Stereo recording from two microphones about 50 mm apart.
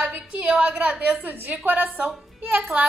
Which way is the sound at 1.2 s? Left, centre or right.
Right.